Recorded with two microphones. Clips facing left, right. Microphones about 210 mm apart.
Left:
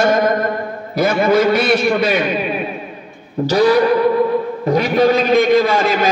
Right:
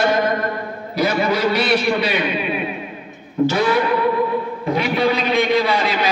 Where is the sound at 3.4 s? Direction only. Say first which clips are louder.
Left 5 dB; 40° left (ahead or behind).